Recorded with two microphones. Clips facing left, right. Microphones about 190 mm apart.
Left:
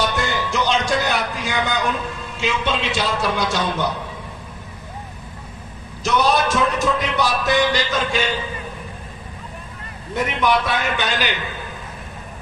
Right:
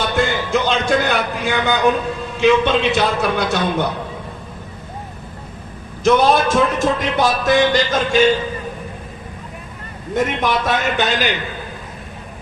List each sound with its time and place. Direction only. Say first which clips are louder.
0.2 s music: right 4 dB; 55° right (ahead or behind)
2.4 s a man's voice: right 9 dB; 60° right (ahead or behind)
6.0 s a man's voice: right 5 dB; 50° right (ahead or behind)
10.2 s a man's voice: right 1 dB; 45° right (ahead or behind)